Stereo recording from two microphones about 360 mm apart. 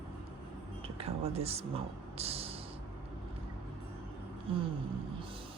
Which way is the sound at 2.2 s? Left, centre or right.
Centre.